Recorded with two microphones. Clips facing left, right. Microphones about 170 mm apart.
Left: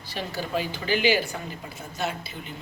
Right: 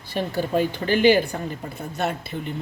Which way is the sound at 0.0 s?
55° right (ahead or behind).